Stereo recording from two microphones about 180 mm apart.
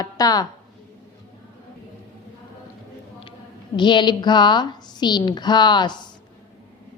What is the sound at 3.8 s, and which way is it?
A woman's voice, 25° left (ahead or behind).